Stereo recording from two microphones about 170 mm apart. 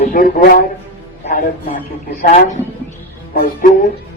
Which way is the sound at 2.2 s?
45° left (ahead or behind).